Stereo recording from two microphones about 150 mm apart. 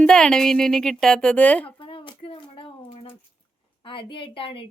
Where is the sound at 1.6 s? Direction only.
35° left (ahead or behind).